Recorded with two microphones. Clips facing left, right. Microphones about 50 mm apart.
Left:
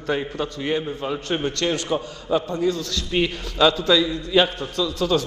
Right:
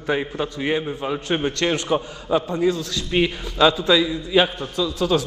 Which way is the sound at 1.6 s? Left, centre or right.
Right.